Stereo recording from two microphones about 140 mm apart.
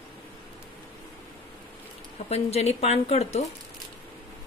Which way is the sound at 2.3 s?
50° left (ahead or behind).